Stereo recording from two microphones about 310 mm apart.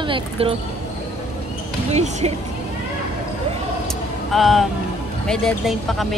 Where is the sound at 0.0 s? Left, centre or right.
Centre.